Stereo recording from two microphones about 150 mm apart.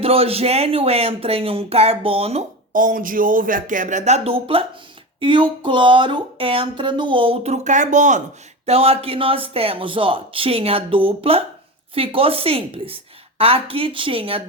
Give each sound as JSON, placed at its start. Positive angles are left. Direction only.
{"t": 0.0, "sound": "speech", "side_deg": -40}
{"t": 2.7, "sound": "speech", "side_deg": -65}
{"t": 8.6, "sound": "speech", "side_deg": -40}